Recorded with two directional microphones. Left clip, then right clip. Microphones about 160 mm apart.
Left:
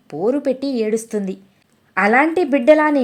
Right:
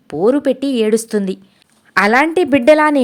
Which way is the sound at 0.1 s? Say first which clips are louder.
Right 5 dB; 20° right (ahead or behind).